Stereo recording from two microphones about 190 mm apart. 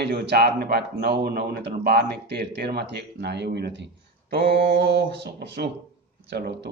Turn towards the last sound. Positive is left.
turn(degrees=-60)  # may be behind; listen again after turning